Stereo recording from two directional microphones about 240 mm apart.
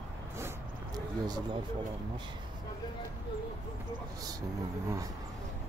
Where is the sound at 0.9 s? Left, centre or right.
Centre.